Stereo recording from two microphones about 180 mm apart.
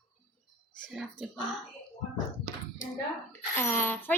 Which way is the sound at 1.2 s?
5° left (ahead or behind).